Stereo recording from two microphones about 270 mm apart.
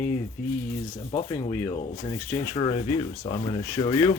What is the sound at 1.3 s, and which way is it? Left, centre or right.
Speech, centre.